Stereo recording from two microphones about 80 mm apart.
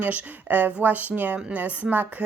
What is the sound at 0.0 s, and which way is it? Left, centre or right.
Speech, right.